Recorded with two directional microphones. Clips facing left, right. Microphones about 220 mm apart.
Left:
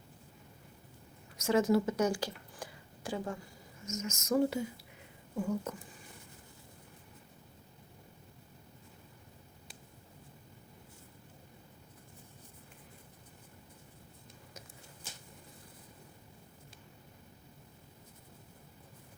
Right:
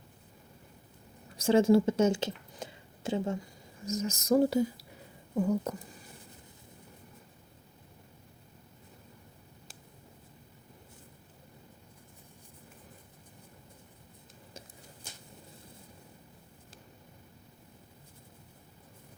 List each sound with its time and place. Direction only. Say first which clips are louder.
1.4 s speech: right 5 dB; 30° right (ahead or behind)
3.8 s speech: right 6 dB; 35° right (ahead or behind)